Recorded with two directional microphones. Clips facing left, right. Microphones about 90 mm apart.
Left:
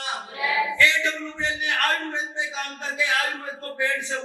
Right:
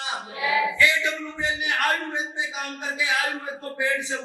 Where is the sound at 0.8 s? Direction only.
15° right (ahead or behind).